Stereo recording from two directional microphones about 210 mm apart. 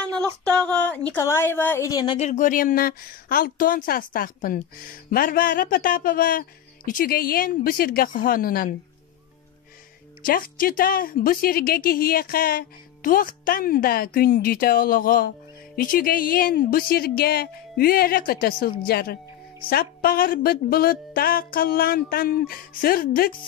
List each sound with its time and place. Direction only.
0.6 s speech: 5° left (ahead or behind)
2.1 s a woman's voice: 35° left (ahead or behind)
10.2 s a woman's voice: 40° left (ahead or behind)